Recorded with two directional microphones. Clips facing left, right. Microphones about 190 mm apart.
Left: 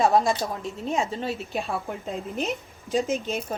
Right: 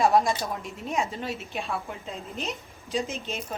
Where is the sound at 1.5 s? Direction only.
35° left (ahead or behind).